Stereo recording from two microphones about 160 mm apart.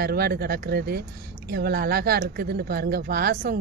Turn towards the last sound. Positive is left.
turn(degrees=-70)  # may be behind; listen again after turning